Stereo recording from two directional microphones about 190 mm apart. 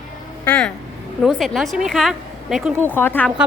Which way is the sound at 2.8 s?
10° left (ahead or behind).